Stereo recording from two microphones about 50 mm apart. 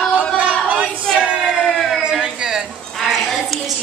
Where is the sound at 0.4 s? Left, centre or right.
Right.